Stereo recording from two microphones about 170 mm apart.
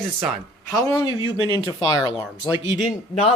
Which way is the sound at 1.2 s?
20° right (ahead or behind).